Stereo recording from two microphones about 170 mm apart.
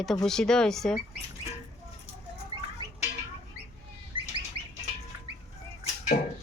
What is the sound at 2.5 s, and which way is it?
Rodents, 30° right (ahead or behind).